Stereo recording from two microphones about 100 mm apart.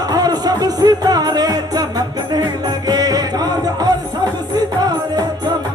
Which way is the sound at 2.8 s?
40° right (ahead or behind).